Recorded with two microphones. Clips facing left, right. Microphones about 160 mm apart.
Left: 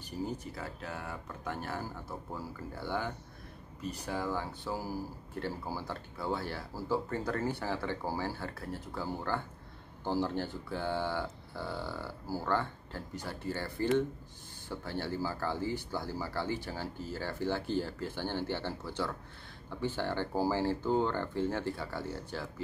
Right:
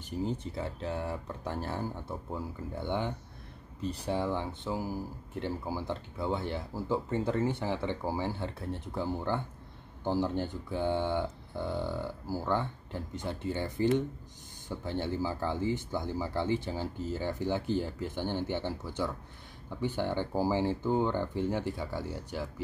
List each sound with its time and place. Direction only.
0.0 s speech: 20° right (ahead or behind)